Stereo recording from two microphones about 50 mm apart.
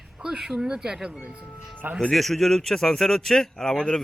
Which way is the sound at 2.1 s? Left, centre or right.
Centre.